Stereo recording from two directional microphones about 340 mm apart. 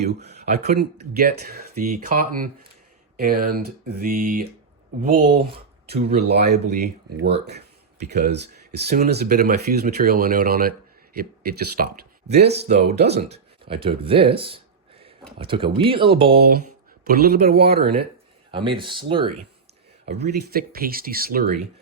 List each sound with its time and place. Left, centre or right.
0.0 s speech: right
5.9 s speech: right
13.7 s speech: centre
17.0 s speech: right
18.5 s speech: centre
20.1 s speech: right